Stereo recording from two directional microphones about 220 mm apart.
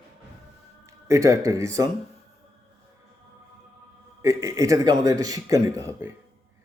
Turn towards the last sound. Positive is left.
turn(degrees=-15)  # may be behind; listen again after turning